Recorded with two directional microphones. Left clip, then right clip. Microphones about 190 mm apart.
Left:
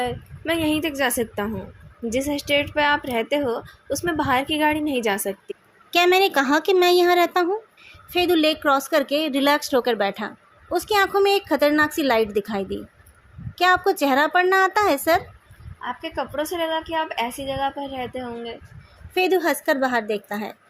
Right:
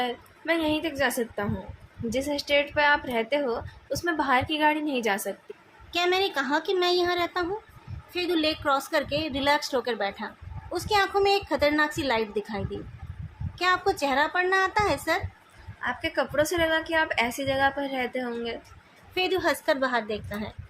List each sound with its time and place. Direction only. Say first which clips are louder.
0.0 s a woman's voice: left 3 dB; 30° left (ahead or behind)
5.9 s a woman's voice: left 8 dB; 40° left (ahead or behind)
15.8 s a woman's voice: even; 10° left (ahead or behind)
19.1 s a woman's voice: left 5 dB; 30° left (ahead or behind)